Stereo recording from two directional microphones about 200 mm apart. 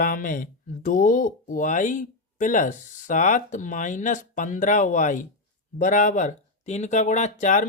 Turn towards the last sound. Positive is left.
turn(degrees=40)  # may be behind; listen again after turning